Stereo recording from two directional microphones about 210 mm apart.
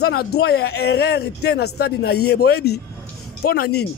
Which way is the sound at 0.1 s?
50° left (ahead or behind).